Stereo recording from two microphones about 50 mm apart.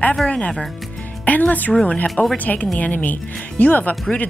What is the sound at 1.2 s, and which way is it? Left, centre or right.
Speech, left.